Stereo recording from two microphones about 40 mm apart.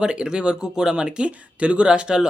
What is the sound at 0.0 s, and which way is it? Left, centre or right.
Speech, right.